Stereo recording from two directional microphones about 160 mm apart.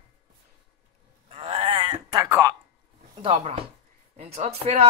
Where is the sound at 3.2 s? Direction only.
35° right (ahead or behind).